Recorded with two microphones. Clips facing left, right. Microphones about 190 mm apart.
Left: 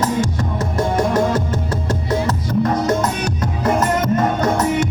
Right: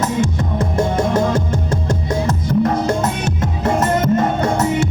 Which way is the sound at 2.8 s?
25° right (ahead or behind).